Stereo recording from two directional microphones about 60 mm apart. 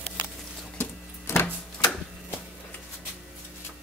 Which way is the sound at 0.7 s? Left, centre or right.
Left.